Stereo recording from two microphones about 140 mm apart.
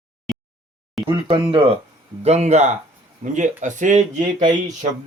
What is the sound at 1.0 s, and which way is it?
Speech, 40° right (ahead or behind).